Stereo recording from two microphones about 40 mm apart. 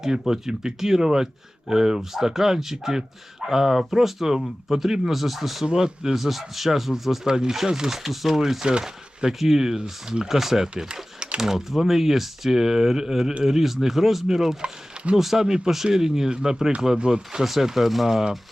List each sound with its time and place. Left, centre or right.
0.0 s speech: centre
5.6 s speech: right
6.1 s speech: centre
7.3 s speech: centre